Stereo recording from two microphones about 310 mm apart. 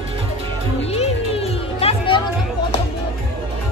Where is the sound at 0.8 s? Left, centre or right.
Centre.